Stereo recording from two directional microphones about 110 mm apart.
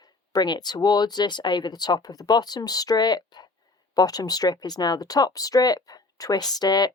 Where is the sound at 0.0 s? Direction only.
40° left (ahead or behind).